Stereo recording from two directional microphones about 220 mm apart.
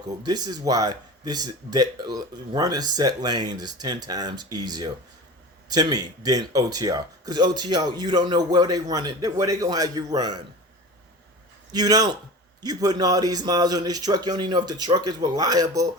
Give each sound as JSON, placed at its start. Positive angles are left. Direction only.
{"t": 0.0, "sound": "speech", "side_deg": -20}
{"t": 11.7, "sound": "speech", "side_deg": -15}